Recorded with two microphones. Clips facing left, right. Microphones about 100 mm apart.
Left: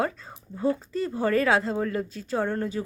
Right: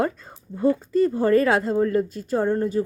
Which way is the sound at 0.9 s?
50° right (ahead or behind).